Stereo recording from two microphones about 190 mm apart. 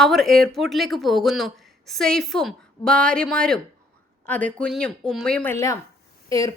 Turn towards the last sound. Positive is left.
turn(degrees=20)  # may be behind; listen again after turning